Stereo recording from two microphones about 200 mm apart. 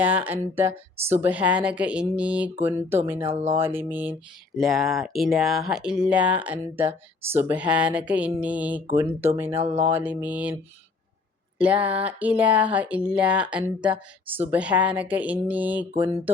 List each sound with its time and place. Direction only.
0.0 s speech: 10° right (ahead or behind)
11.5 s speech: 5° right (ahead or behind)